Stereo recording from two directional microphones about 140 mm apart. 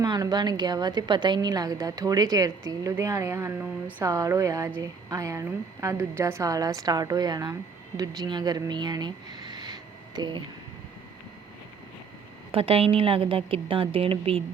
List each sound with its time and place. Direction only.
0.0 s a woman's voice: 30° right (ahead or behind)
12.5 s a woman's voice: 40° right (ahead or behind)